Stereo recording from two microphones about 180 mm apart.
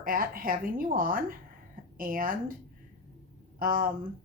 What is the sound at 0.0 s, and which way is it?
A woman's voice, 55° right (ahead or behind).